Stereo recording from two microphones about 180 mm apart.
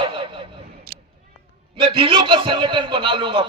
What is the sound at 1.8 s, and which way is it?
A man's voice, 30° right (ahead or behind).